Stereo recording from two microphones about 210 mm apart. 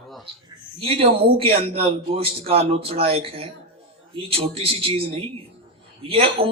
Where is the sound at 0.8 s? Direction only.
25° right (ahead or behind).